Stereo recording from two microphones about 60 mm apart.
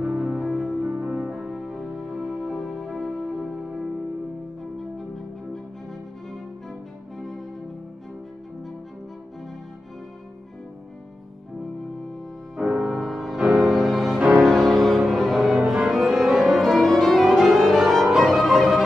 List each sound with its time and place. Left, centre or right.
0.0 s music: centre
6.3 s music: centre
12.5 s music: centre
14.1 s music: centre
14.4 s cello: centre